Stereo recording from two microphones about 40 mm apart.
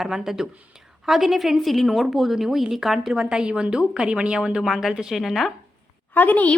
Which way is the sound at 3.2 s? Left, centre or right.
Right.